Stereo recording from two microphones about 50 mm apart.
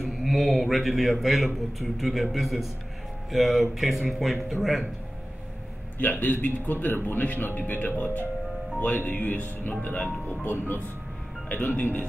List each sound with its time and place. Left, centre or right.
0.0 s a man's voice: centre
5.9 s speech: left